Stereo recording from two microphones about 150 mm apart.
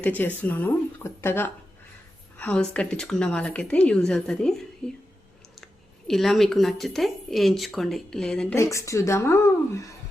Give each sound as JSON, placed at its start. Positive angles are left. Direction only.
{"t": 0.0, "sound": "a woman's voice", "side_deg": 10}
{"t": 6.1, "sound": "speech", "side_deg": 0}
{"t": 8.5, "sound": "speech", "side_deg": 20}